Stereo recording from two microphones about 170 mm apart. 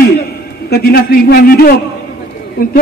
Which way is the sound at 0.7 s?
65° left (ahead or behind).